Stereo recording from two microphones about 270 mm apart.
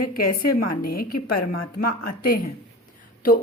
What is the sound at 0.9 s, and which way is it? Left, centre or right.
Speech, left.